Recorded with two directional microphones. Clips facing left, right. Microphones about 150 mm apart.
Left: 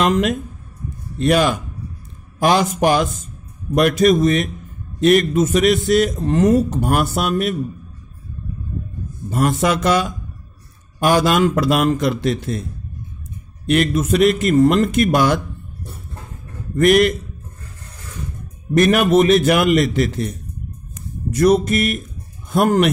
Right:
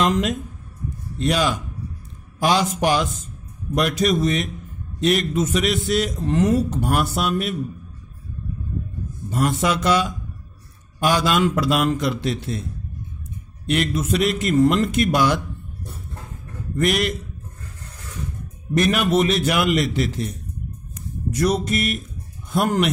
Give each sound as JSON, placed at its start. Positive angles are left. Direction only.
{"t": 0.0, "sound": "a man's voice", "side_deg": 60}
{"t": 9.3, "sound": "a man's voice", "side_deg": 50}
{"t": 13.7, "sound": "a man's voice", "side_deg": 55}
{"t": 16.7, "sound": "a man's voice", "side_deg": 50}
{"t": 18.8, "sound": "a man's voice", "side_deg": 50}
{"t": 21.3, "sound": "a man's voice", "side_deg": 50}